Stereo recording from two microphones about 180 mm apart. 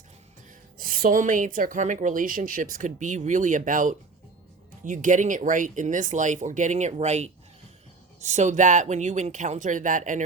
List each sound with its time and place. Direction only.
0.8 s speech: 55° right (ahead or behind)